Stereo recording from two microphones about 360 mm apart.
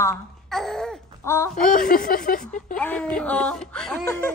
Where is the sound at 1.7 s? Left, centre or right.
Left.